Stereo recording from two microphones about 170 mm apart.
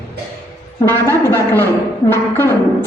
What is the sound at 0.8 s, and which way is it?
A woman's voice, 15° left (ahead or behind).